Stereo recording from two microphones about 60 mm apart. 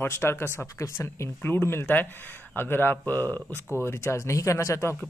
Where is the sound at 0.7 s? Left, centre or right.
Left.